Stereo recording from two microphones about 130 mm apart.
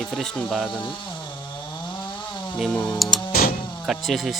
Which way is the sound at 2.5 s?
5° left (ahead or behind).